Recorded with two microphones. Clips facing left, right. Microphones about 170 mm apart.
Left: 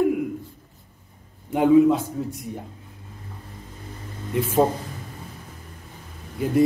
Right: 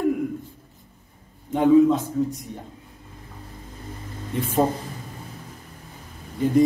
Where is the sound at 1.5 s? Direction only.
10° left (ahead or behind).